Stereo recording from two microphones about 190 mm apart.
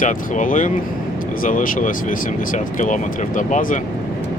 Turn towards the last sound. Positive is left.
turn(degrees=40)  # may be behind; listen again after turning